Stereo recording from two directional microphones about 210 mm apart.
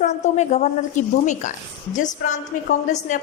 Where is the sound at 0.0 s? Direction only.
35° left (ahead or behind).